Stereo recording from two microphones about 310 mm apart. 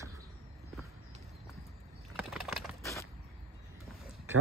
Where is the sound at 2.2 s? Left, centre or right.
Centre.